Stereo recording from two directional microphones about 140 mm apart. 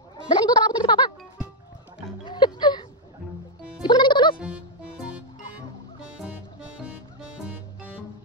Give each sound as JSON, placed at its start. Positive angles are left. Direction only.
{"t": 0.3, "sound": "music", "side_deg": 30}
{"t": 2.2, "sound": "music", "side_deg": 30}
{"t": 4.4, "sound": "music", "side_deg": -5}